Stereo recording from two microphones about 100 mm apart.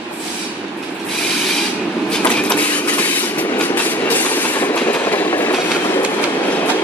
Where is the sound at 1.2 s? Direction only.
5° left (ahead or behind); by 6.0 s 20° left (ahead or behind).